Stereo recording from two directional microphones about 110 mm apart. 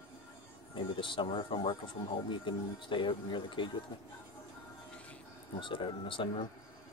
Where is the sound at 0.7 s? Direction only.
50° left (ahead or behind).